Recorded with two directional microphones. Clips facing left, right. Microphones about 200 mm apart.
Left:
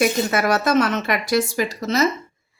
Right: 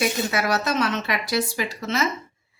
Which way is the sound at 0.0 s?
50° left (ahead or behind).